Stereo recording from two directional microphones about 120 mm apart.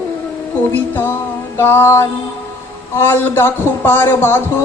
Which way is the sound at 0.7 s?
15° left (ahead or behind).